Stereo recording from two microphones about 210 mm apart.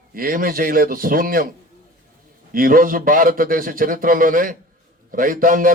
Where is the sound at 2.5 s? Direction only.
40° right (ahead or behind).